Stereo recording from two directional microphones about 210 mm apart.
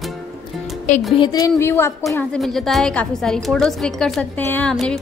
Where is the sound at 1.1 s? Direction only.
20° left (ahead or behind); by 4.9 s 5° left (ahead or behind).